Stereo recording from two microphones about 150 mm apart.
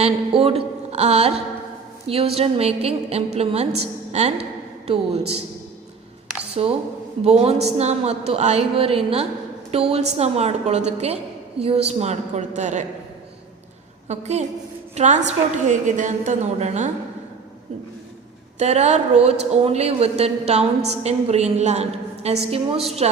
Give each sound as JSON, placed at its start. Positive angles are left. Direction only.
{"t": 0.0, "sound": "a woman's voice", "side_deg": -40}
{"t": 6.5, "sound": "a woman's voice", "side_deg": -40}
{"t": 14.1, "sound": "speech", "side_deg": -50}
{"t": 18.6, "sound": "a woman's voice", "side_deg": -45}